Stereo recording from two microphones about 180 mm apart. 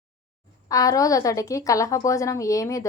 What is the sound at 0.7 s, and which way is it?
A woman's voice, 20° left (ahead or behind).